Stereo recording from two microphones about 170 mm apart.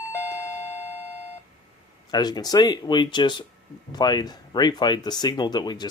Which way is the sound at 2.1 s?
25° left (ahead or behind).